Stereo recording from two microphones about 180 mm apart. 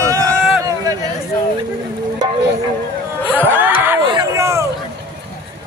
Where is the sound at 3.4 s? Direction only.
10° right (ahead or behind).